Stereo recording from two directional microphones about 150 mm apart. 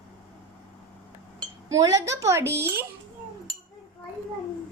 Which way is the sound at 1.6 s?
20° right (ahead or behind).